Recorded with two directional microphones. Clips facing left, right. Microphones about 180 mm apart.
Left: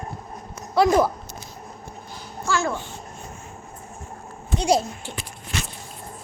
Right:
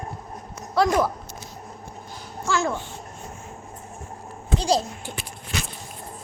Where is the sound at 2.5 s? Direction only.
20° right (ahead or behind).